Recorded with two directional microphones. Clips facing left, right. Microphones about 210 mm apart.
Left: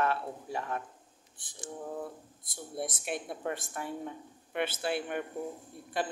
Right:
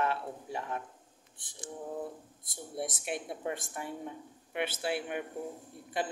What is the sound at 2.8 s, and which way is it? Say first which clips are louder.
A woman's voice: even; 15° right (ahead or behind).